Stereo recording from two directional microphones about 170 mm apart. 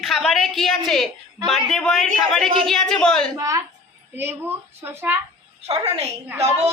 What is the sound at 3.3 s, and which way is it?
A child's voice, 20° right (ahead or behind).